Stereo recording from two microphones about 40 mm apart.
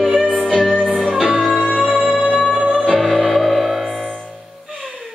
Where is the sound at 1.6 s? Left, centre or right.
Centre.